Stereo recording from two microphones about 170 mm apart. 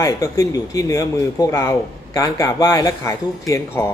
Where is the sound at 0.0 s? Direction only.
20° left (ahead or behind).